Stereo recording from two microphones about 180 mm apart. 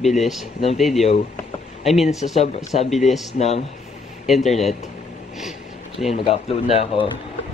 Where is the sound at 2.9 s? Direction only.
Centre (ahead or behind).